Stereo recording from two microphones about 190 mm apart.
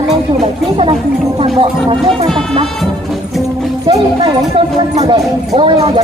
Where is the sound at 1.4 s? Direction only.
30° right (ahead or behind).